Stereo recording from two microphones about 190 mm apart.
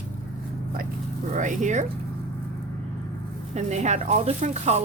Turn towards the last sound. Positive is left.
turn(degrees=-35)  # may be behind; listen again after turning